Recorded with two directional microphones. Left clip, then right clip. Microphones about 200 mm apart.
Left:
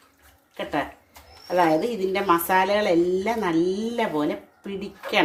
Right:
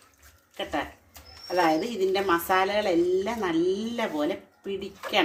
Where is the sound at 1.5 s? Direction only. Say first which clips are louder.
Left 3 dB; 35° left (ahead or behind).